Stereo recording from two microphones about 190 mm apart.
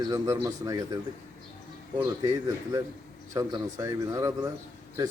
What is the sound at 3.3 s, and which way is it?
Speech, 15° right (ahead or behind).